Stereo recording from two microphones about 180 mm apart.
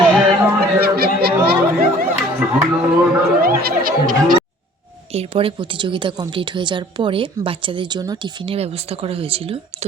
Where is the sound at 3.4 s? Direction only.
55° right (ahead or behind).